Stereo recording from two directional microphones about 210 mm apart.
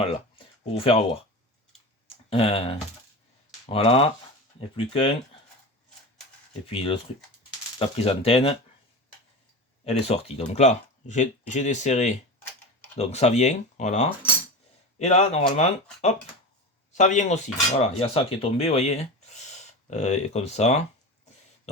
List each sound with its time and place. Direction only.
0.0 s speech: 25° left (ahead or behind)
2.3 s speech: 25° left (ahead or behind)
6.7 s speech: 25° left (ahead or behind)
9.8 s speech: 30° left (ahead or behind)